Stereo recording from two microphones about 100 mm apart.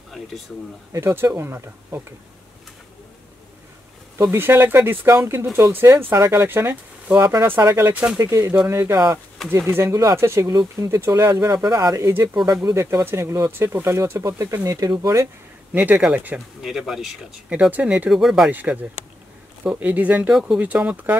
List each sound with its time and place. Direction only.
0.9 s speech: 25° right (ahead or behind)
4.2 s speech: 25° right (ahead or behind)
7.9 s speech: 10° right (ahead or behind)
8.2 s speech: 40° right (ahead or behind)
8.6 s speech: 25° right (ahead or behind)
10.5 s speech: 45° right (ahead or behind)
10.9 s speech: 30° right (ahead or behind)
15.7 s speech: 20° right (ahead or behind)
17.5 s speech: 15° right (ahead or behind)
18.1 s speech: 5° right (ahead or behind)
18.5 s speech: 15° right (ahead or behind)